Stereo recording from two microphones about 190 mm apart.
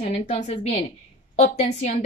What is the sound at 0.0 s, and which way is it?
Speech, 35° left (ahead or behind).